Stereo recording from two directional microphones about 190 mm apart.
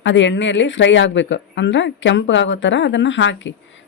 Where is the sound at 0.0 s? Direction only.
75° left (ahead or behind).